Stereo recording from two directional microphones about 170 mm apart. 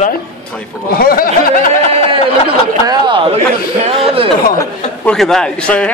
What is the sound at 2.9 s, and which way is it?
Speech, 30° right (ahead or behind).